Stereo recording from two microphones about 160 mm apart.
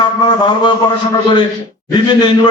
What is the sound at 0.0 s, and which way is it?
Speech, 30° left (ahead or behind).